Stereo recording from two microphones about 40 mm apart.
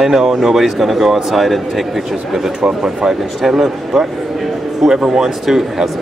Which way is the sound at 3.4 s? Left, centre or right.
Centre.